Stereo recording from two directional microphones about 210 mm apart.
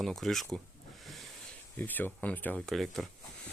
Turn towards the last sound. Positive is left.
turn(degrees=0)  # may be behind; listen again after turning